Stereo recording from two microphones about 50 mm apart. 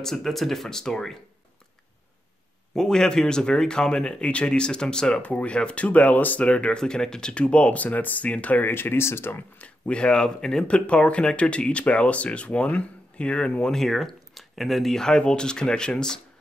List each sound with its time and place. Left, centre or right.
0.0 s speech: centre
2.7 s speech: centre; by 6.4 s left
6.4 s speech: left
8.6 s speech: left
9.6 s speech: left
13.7 s speech: centre
15.0 s speech: centre